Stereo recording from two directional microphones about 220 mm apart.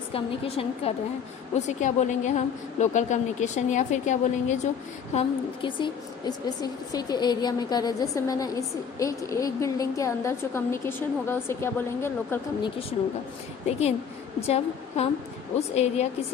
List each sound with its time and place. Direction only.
0.1 s a woman's voice: 25° left (ahead or behind)
5.6 s a woman's voice: 20° left (ahead or behind)
13.7 s a woman's voice: 30° left (ahead or behind)